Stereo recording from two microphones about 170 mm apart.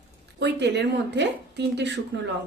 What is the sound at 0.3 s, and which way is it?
Speech, 85° right.